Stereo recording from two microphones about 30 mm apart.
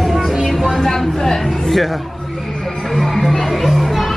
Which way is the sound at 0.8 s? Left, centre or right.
Centre.